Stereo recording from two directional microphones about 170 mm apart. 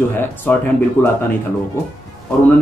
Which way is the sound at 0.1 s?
10° left (ahead or behind).